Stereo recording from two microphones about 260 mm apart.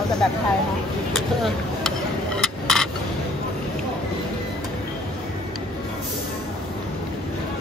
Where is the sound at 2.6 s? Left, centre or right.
Centre.